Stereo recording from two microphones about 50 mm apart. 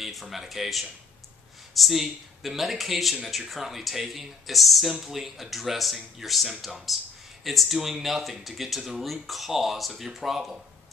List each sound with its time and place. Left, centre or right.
0.0 s speech: centre